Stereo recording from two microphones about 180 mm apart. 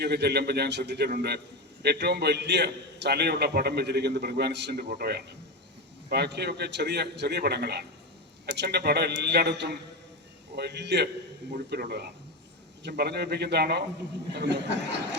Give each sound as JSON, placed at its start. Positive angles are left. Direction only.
{"t": 0.0, "sound": "a man's voice", "side_deg": -70}